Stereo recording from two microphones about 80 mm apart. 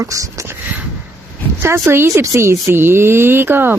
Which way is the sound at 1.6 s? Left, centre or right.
Right.